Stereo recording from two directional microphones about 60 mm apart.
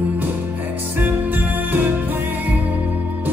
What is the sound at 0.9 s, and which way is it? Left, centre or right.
Music, right.